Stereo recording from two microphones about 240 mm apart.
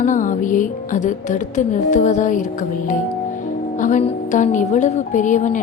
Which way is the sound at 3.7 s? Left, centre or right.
Left.